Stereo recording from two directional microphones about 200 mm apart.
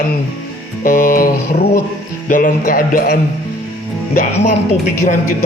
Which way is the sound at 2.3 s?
45° left (ahead or behind).